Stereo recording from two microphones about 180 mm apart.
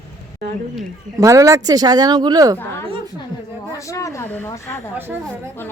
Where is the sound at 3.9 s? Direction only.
15° left (ahead or behind).